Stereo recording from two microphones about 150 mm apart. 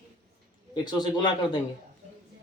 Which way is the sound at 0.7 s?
30° left (ahead or behind).